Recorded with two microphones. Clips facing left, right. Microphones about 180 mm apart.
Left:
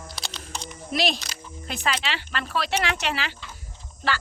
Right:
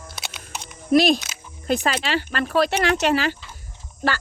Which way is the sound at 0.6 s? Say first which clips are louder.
Right 10 dB; 50° right (ahead or behind).